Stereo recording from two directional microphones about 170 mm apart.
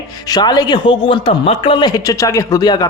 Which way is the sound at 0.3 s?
25° left (ahead or behind).